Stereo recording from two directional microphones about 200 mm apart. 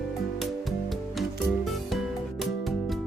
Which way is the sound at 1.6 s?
Centre (ahead or behind).